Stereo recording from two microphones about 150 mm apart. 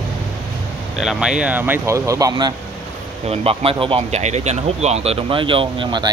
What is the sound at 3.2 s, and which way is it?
Speech, 40° right (ahead or behind).